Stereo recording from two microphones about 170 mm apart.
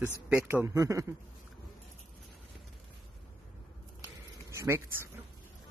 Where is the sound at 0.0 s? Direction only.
10° right (ahead or behind).